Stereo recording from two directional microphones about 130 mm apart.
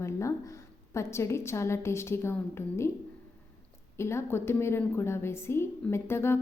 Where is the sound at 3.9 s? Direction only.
20° left (ahead or behind).